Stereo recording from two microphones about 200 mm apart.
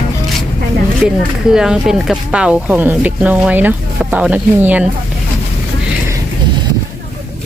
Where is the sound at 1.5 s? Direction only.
5° right (ahead or behind).